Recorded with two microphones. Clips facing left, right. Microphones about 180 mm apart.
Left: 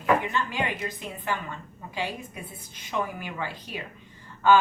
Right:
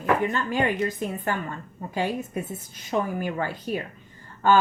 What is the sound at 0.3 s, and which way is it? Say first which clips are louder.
A woman's voice: right 4 dB; 45° right (ahead or behind).